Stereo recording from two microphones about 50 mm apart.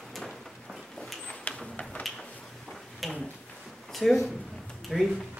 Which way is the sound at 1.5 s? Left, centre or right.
Left.